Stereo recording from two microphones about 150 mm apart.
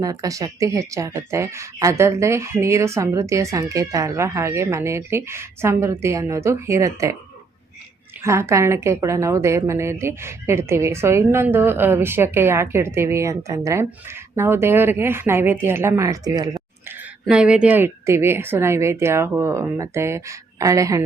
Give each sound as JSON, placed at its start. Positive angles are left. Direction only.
{"t": 0.0, "sound": "speech", "side_deg": -25}
{"t": 8.2, "sound": "a woman's voice", "side_deg": -20}
{"t": 17.2, "sound": "a woman's voice", "side_deg": -5}